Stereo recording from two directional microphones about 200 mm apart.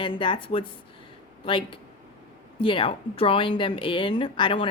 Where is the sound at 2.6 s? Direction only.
25° left (ahead or behind).